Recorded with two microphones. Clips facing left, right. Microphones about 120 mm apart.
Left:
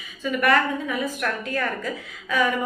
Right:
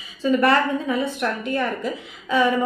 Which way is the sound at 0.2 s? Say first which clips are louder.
Right 3 dB; 30° right (ahead or behind).